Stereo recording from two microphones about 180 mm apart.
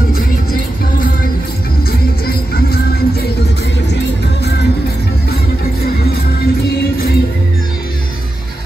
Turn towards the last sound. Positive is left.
turn(degrees=55)  # may be behind; listen again after turning